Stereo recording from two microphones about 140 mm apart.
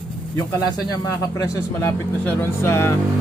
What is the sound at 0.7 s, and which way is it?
Speech, 25° left (ahead or behind).